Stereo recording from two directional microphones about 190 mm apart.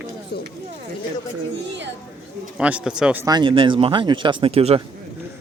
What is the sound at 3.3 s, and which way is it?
Speech, 25° right (ahead or behind).